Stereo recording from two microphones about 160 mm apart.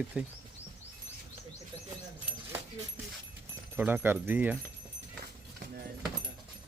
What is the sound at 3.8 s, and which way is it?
Speech, 10° right (ahead or behind).